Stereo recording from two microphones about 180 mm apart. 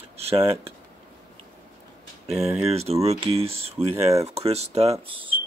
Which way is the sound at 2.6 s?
35° right (ahead or behind).